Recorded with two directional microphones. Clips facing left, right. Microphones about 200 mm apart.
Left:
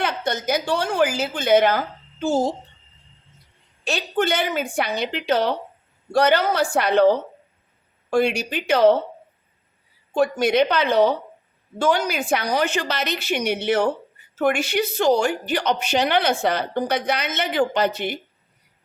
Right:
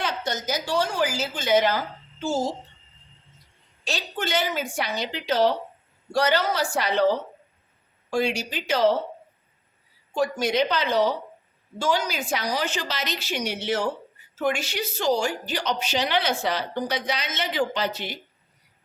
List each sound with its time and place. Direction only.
0.0 s a woman's voice: 60° left (ahead or behind)
3.8 s a woman's voice: 55° left (ahead or behind)
10.2 s a woman's voice: 60° left (ahead or behind)